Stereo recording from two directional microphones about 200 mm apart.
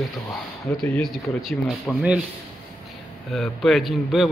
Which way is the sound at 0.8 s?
Centre (ahead or behind).